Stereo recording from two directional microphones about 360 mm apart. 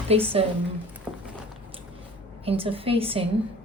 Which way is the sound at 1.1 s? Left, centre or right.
Centre.